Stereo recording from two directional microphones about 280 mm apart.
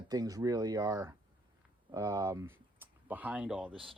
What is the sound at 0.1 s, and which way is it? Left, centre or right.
Speech, centre.